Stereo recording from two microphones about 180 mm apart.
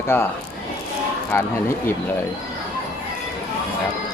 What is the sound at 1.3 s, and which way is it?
Speech, 15° left (ahead or behind).